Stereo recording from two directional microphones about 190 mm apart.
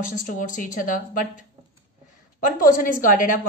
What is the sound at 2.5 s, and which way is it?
Speech, 45° left (ahead or behind).